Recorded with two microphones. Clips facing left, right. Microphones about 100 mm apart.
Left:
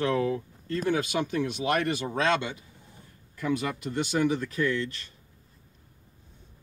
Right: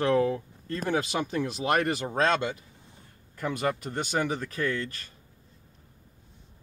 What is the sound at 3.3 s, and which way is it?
Speech, 45° right (ahead or behind).